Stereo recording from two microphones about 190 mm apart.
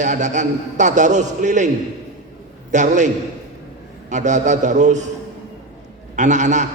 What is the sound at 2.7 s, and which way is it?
Speech, 40° right (ahead or behind).